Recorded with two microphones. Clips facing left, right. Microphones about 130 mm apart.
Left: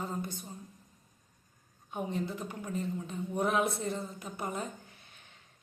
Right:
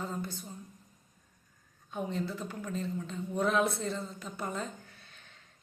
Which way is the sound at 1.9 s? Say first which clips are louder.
Even; 15° left (ahead or behind).